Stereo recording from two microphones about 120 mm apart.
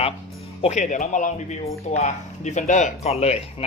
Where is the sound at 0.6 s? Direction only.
75° left (ahead or behind).